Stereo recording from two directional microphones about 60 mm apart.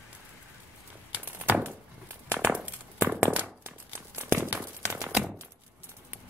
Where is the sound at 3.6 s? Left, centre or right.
Right.